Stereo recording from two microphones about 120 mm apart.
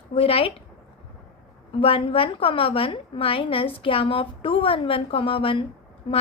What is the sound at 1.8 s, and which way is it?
A woman's voice, 50° left (ahead or behind).